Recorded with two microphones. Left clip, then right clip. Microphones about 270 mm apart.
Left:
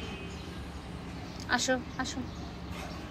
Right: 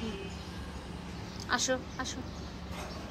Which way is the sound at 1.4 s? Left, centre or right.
Centre.